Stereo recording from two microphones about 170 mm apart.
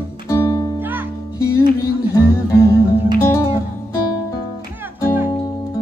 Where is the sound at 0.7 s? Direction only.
10° right (ahead or behind).